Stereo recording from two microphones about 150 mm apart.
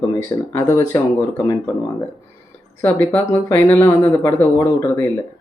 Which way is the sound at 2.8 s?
10° left (ahead or behind).